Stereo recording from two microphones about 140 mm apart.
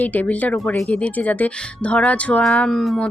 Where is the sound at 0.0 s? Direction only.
10° left (ahead or behind).